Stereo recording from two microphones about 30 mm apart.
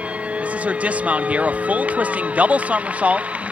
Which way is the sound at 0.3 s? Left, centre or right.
Right.